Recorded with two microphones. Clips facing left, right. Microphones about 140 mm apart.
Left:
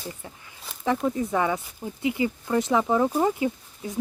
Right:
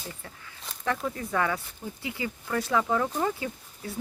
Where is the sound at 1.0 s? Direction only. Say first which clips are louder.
Left 4 dB; 20° left (ahead or behind).